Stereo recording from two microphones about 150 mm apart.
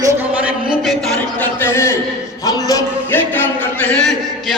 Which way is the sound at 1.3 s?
10° left (ahead or behind).